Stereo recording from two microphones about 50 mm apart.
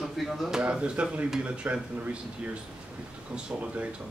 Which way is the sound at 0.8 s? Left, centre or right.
Right.